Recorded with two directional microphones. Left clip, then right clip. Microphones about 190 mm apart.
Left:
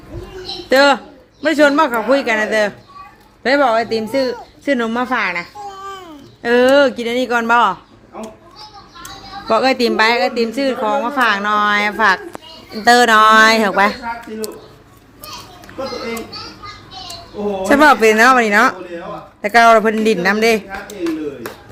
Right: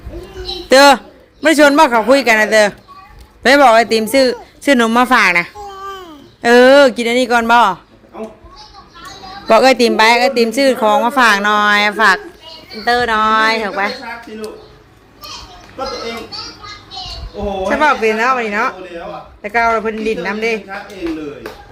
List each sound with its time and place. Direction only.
0.7 s a man's voice: 30° right (ahead or behind)
5.6 s babbling: 5° left (ahead or behind)
6.4 s speech: 30° right (ahead or behind)
9.5 s speech: 25° right (ahead or behind)
11.9 s a woman's voice: 10° right (ahead or behind)
12.8 s a man's voice: 30° left (ahead or behind)
17.6 s a man's voice: 30° left (ahead or behind)